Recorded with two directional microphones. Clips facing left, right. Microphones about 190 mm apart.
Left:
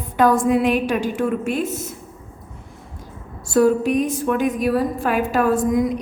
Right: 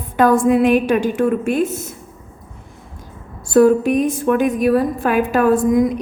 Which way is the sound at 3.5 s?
55° right (ahead or behind).